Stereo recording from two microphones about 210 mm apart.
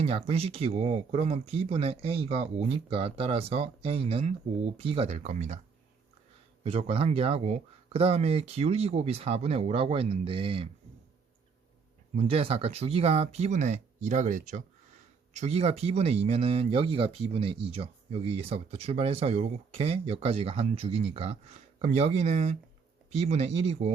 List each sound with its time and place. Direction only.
0.0 s speech: 30° right (ahead or behind)
6.6 s speech: 25° right (ahead or behind)
12.1 s speech: 25° right (ahead or behind)